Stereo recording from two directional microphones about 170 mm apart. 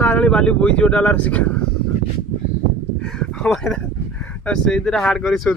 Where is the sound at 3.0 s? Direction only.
5° left (ahead or behind).